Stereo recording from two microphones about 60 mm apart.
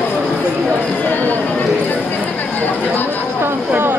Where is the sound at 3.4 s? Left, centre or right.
Right.